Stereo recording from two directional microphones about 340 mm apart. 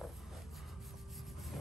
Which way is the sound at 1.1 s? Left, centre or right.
Centre.